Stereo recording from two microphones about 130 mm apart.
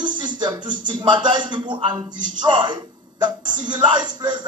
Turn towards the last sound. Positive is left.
turn(degrees=-35)  # may be behind; listen again after turning